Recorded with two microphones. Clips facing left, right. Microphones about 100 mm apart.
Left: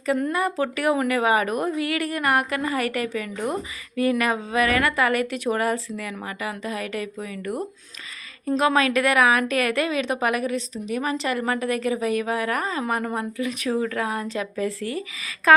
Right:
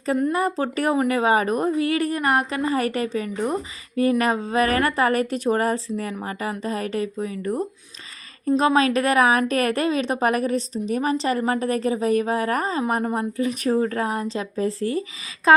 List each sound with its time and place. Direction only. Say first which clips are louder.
0.2 s a woman's voice: right 2 dB; 30° right (ahead or behind)
8.5 s a woman's voice: right 1 dB; 30° right (ahead or behind)